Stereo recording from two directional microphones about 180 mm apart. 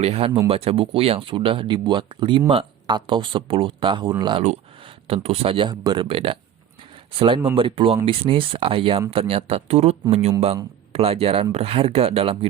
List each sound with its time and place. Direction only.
0.0 s speech: 30° right (ahead or behind)